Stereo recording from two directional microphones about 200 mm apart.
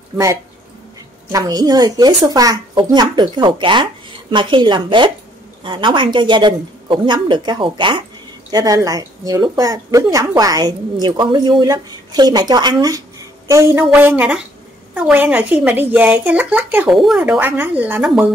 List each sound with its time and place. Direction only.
1.3 s speech: 20° right (ahead or behind)